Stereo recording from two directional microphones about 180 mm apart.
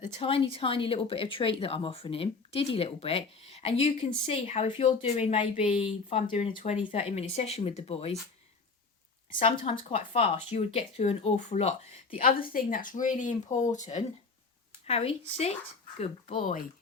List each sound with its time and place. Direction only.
0.2 s speech: 30° left (ahead or behind)
9.4 s speech: 30° left (ahead or behind)
12.4 s speech: 50° left (ahead or behind); by 15.5 s 35° left (ahead or behind)
16.4 s speech: 50° left (ahead or behind)